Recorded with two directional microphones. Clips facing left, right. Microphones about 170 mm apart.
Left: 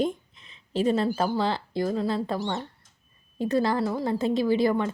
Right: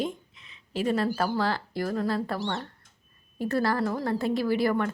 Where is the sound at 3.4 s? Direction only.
20° left (ahead or behind).